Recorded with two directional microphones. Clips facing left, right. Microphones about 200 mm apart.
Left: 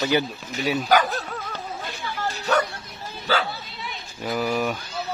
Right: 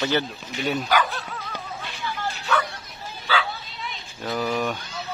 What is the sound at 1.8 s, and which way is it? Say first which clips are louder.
Bow-wow: even; 40° left (ahead or behind).